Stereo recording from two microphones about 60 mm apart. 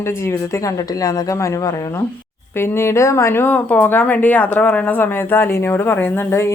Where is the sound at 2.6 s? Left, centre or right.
Left.